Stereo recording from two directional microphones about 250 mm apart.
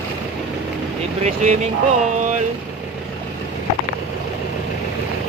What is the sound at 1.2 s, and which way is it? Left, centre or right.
Speech, right.